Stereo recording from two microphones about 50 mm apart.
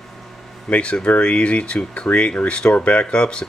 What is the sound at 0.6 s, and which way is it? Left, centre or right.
Speech, left.